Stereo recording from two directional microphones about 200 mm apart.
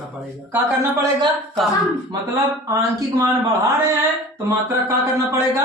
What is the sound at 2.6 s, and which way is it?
Speech, 15° right (ahead or behind).